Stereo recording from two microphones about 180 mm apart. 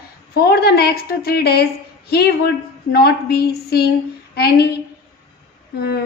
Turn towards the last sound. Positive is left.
turn(degrees=60)  # may be behind; listen again after turning